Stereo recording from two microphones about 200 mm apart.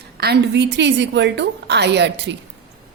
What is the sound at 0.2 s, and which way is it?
A woman's voice, 55° right (ahead or behind).